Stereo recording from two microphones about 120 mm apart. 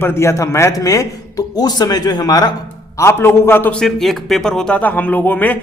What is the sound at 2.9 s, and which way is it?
Speech, 20° left (ahead or behind).